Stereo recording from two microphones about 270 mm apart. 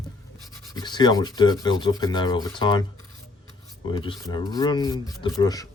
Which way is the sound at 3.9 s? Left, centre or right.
Centre.